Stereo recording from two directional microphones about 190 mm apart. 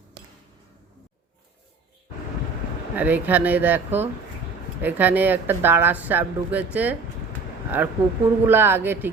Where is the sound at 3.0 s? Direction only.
10° right (ahead or behind).